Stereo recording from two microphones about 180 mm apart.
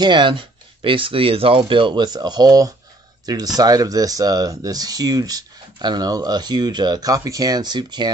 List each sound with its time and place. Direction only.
0.0 s speech: 25° right (ahead or behind)